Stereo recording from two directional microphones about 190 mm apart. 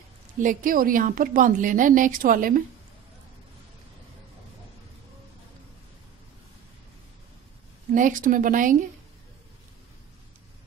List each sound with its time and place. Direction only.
0.4 s a woman's voice: 45° right (ahead or behind)
7.9 s a woman's voice: 45° right (ahead or behind)